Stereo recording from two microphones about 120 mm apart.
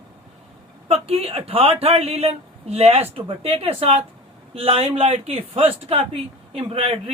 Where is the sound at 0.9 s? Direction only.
55° right (ahead or behind).